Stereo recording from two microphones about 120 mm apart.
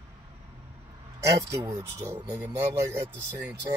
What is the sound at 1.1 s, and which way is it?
A man's voice, 25° right (ahead or behind).